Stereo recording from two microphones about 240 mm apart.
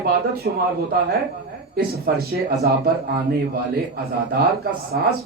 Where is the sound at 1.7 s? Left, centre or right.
Right.